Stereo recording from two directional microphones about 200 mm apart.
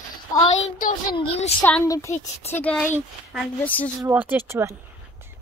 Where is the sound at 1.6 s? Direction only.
5° left (ahead or behind).